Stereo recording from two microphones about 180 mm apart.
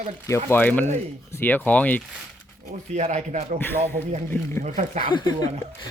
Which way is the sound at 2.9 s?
40° right (ahead or behind).